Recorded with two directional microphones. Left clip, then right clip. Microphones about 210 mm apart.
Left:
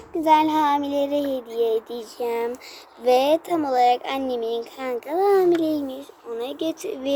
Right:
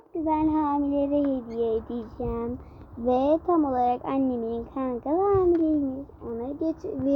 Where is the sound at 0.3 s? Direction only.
40° left (ahead or behind).